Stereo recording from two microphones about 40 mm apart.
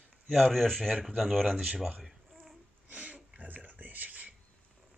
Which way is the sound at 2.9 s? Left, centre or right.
Right.